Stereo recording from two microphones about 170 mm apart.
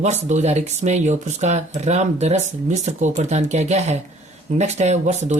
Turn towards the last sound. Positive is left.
turn(degrees=-45)  # may be behind; listen again after turning